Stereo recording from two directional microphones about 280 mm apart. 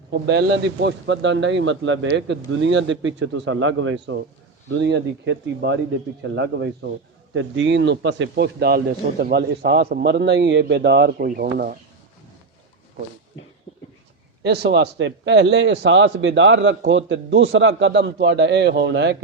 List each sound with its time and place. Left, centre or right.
0.1 s a man's voice: right
14.4 s a man's voice: right